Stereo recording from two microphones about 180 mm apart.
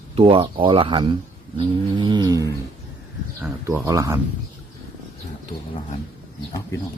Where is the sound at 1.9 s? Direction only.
25° right (ahead or behind).